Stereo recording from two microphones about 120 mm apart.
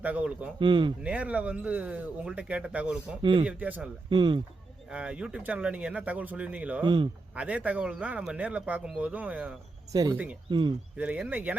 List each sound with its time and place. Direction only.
0.0 s speech: 10° right (ahead or behind)
0.6 s speech: 40° right (ahead or behind)
1.0 s speech: 10° right (ahead or behind)
3.2 s speech: 40° right (ahead or behind)
3.4 s speech: 10° right (ahead or behind)
4.1 s speech: 40° right (ahead or behind)
4.9 s speech: 10° right (ahead or behind)
6.8 s speech: 40° right (ahead or behind)
7.3 s speech: 10° right (ahead or behind)
9.9 s speech: 30° right (ahead or behind)
10.9 s speech: 10° right (ahead or behind)